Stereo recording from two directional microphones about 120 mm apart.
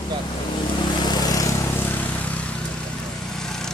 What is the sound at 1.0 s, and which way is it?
Vehicle, 35° left (ahead or behind).